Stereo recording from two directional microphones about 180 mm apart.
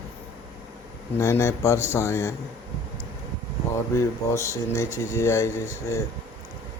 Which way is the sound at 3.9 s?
15° left (ahead or behind).